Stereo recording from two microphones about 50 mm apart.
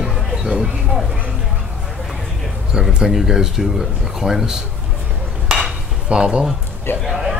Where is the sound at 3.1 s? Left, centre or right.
Centre.